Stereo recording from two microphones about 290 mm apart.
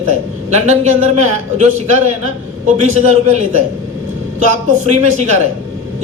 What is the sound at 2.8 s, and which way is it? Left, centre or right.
Speech, right.